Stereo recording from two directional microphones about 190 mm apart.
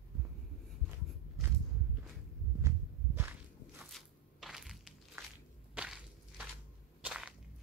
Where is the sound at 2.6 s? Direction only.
10° right (ahead or behind).